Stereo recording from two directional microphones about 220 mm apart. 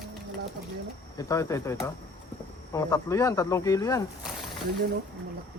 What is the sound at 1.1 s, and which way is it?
Speech, 15° left (ahead or behind).